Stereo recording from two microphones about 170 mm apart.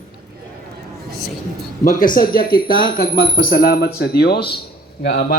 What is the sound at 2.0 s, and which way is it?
Speech, 55° left (ahead or behind).